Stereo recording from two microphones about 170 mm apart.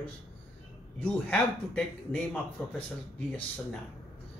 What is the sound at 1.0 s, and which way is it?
Speech, 5° left (ahead or behind).